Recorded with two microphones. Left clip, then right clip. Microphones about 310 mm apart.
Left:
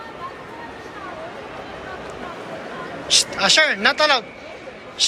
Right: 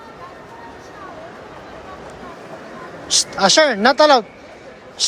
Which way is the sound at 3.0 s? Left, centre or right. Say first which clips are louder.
Right 1 dB; centre.